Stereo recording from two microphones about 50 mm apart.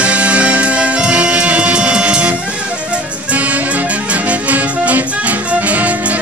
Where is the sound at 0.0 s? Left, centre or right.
Right.